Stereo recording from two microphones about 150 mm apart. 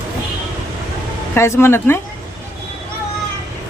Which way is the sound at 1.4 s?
15° left (ahead or behind).